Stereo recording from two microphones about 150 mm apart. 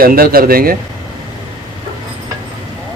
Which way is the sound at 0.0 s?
80° right.